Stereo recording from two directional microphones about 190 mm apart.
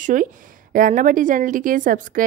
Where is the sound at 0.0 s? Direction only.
45° right (ahead or behind).